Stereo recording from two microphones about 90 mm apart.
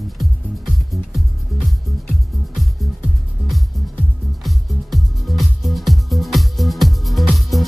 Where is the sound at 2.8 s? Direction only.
Centre (ahead or behind).